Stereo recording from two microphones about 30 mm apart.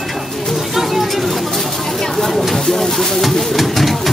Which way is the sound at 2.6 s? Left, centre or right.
Centre.